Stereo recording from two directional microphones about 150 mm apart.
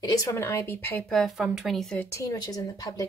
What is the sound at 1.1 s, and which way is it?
Speech, centre (ahead or behind).